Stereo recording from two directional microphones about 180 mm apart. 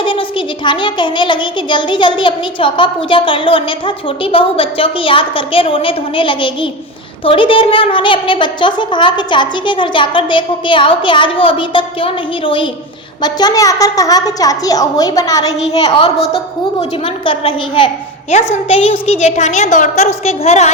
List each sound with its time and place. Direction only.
0.0 s a woman's voice: 30° left (ahead or behind)
15.7 s a woman's voice: 30° left (ahead or behind)